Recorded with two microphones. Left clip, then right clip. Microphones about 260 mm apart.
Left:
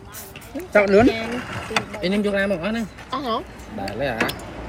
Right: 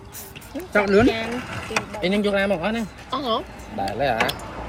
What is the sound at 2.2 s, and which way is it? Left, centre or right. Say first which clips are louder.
Speech: right 1 dB; right.